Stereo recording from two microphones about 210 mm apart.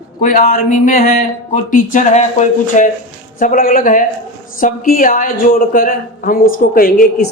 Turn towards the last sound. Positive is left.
turn(degrees=40)  # may be behind; listen again after turning